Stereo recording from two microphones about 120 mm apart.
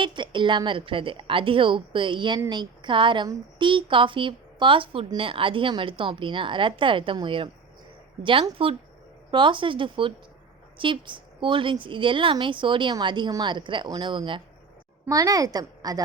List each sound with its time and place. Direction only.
0.0 s a woman's voice: 40° right (ahead or behind)
15.1 s a woman's voice: 30° right (ahead or behind)